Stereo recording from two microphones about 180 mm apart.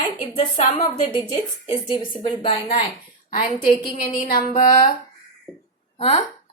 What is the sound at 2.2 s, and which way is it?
Speech, 30° left (ahead or behind).